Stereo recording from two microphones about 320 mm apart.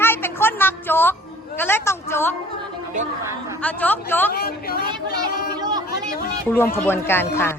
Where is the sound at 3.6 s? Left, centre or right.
Centre.